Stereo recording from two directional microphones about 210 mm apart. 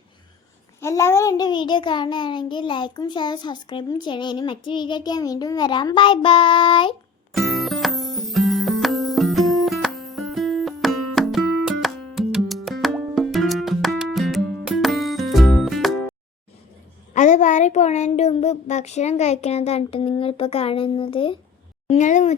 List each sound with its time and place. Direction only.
0.8 s a child's voice: 15° left (ahead or behind)
7.3 s music: centre (ahead or behind)
17.2 s speech: 35° left (ahead or behind)
21.8 s speech: 35° left (ahead or behind)